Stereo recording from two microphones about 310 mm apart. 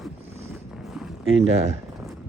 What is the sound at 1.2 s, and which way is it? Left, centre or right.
Speech, right.